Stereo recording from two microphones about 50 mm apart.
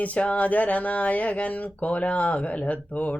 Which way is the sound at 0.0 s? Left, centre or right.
Left.